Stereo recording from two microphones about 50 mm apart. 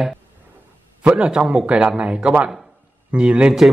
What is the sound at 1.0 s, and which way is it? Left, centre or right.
Speech, right.